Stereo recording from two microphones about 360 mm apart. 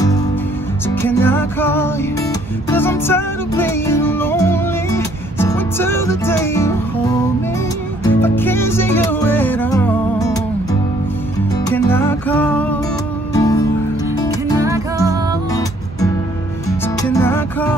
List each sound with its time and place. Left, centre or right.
0.8 s music: centre
8.1 s music: centre
14.6 s music: centre
17.0 s music: centre